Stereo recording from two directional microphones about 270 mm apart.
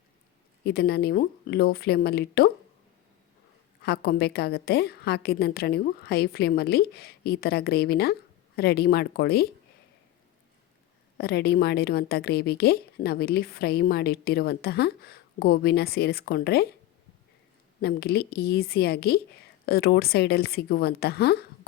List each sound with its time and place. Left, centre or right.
0.6 s a woman's voice: left
3.8 s a woman's voice: left
11.2 s a woman's voice: left
17.7 s a woman's voice: left